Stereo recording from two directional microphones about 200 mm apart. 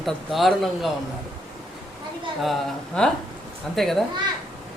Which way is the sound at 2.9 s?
5° left (ahead or behind).